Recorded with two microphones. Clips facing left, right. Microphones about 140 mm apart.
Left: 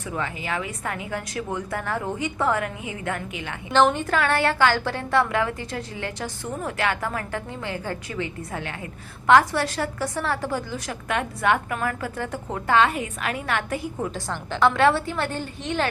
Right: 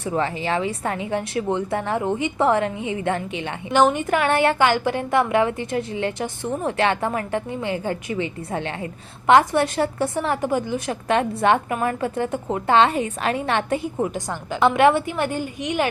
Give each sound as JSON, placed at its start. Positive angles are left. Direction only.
{"t": 0.0, "sound": "a woman's voice", "side_deg": -35}